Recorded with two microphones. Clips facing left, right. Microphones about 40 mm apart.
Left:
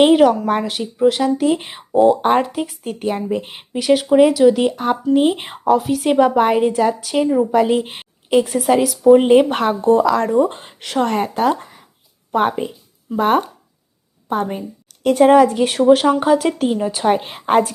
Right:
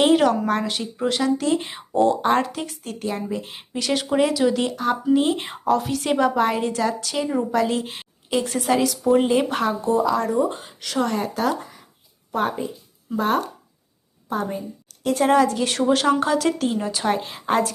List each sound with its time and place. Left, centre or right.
0.1 s speech: centre
3.0 s speech: left
3.7 s speech: centre
4.7 s speech: left
5.1 s speech: centre
6.1 s speech: left
6.6 s speech: centre
8.4 s a woman's voice: centre
9.5 s speech: left
15.6 s speech: centre
17.2 s speech: left